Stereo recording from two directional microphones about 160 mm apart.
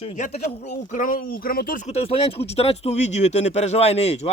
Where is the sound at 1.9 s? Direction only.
40° left (ahead or behind).